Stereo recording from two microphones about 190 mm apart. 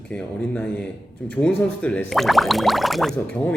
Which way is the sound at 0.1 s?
5° left (ahead or behind).